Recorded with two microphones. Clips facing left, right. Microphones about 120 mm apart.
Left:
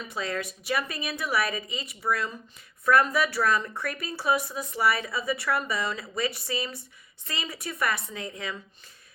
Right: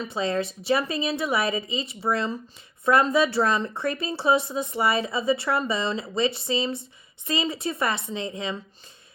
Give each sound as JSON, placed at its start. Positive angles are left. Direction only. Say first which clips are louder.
{"t": 0.0, "sound": "speech", "louder": "right 6 dB", "side_deg": -25}